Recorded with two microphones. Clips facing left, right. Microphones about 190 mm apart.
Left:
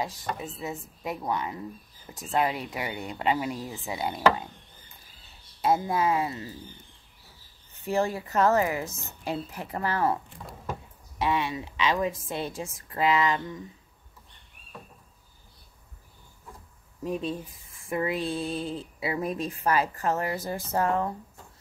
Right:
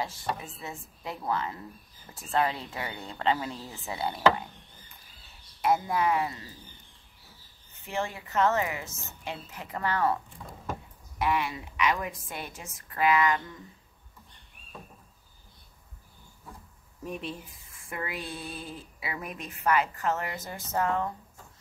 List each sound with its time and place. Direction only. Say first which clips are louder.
0.6 s speech: left 6 dB; 20° left (ahead or behind)
5.6 s speech: left 1 dB; 25° left (ahead or behind)
7.8 s a woman's voice: left 7 dB; 35° left (ahead or behind)
11.1 s speech: left 1 dB; 25° left (ahead or behind)
17.8 s speech: left 8 dB; 25° left (ahead or behind)